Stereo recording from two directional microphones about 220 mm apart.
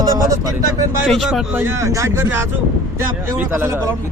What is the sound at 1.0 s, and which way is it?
A man's voice, centre (ahead or behind).